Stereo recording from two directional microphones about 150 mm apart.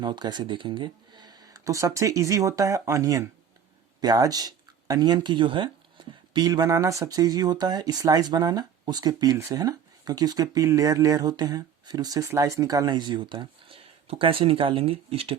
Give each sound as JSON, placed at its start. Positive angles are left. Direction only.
{"t": 0.0, "sound": "speech", "side_deg": -30}